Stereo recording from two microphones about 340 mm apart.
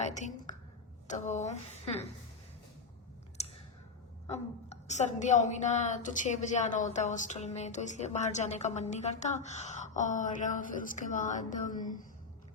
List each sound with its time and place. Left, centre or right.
0.0 s a woman's voice: left
3.4 s a sound: centre
4.3 s a woman's voice: centre